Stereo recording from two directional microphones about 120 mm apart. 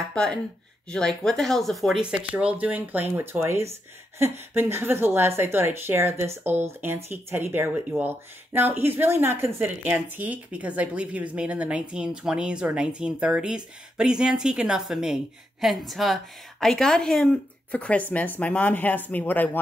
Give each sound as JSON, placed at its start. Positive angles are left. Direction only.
{"t": 0.1, "sound": "a woman's voice", "side_deg": 5}
{"t": 2.0, "sound": "a woman's voice", "side_deg": -10}